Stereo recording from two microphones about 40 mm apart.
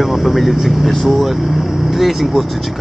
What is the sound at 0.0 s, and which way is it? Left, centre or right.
Speech, centre.